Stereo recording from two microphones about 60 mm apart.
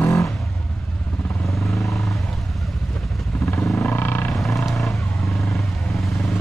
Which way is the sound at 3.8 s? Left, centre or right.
Left.